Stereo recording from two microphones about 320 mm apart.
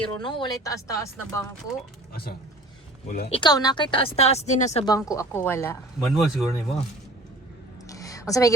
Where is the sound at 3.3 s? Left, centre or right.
Centre.